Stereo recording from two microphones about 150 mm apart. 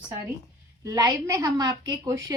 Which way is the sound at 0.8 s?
25° right (ahead or behind).